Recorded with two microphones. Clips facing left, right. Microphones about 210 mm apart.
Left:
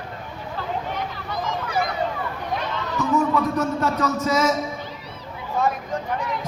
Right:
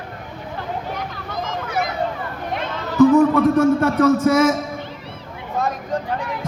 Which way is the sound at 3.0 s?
55° right (ahead or behind).